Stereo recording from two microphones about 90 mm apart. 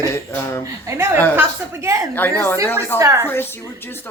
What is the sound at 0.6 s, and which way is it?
A woman's voice, 30° right (ahead or behind).